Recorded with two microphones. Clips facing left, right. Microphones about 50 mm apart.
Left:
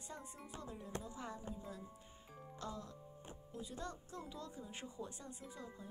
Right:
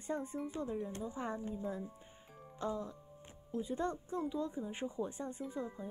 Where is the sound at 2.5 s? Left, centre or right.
Right.